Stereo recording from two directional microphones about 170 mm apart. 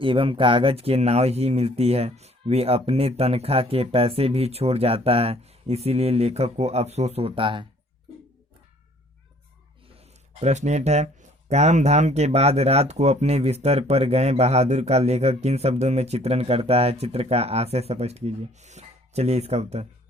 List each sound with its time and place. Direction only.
0.0 s speech: 30° right (ahead or behind)
10.4 s speech: 40° right (ahead or behind)